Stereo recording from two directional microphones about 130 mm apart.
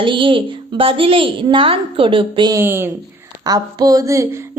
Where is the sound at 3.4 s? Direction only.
30° right (ahead or behind).